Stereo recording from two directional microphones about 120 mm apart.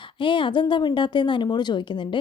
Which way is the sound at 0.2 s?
45° left (ahead or behind).